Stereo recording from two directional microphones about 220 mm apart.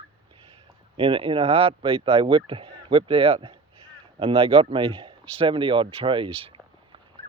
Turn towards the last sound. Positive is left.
turn(degrees=-25)  # may be behind; listen again after turning